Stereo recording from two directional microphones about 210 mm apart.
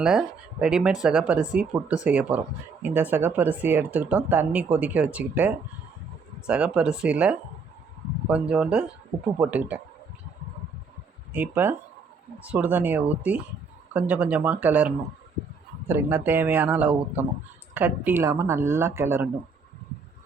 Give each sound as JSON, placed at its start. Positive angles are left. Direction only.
{"t": 0.0, "sound": "speech", "side_deg": -5}
{"t": 6.5, "sound": "speech", "side_deg": -5}
{"t": 11.3, "sound": "speech", "side_deg": -10}